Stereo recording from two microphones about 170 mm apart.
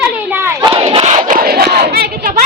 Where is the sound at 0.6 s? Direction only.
30° right (ahead or behind).